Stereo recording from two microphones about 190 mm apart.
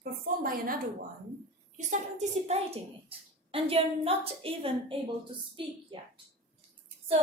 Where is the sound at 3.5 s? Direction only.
30° right (ahead or behind).